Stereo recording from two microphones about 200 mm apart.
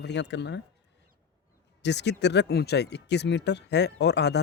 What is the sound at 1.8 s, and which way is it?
Speech, 60° left (ahead or behind).